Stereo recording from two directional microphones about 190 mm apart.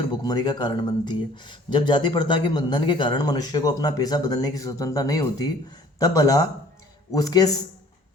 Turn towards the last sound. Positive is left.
turn(degrees=20)  # may be behind; listen again after turning